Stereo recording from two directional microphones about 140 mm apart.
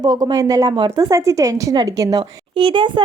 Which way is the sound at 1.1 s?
20° right (ahead or behind).